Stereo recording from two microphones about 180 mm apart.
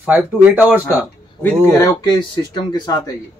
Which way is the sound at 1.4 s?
15° left (ahead or behind).